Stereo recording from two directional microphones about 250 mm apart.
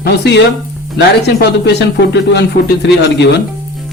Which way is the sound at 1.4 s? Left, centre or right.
Left.